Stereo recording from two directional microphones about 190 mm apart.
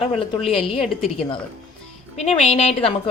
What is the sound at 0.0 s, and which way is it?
Speech, 30° left (ahead or behind).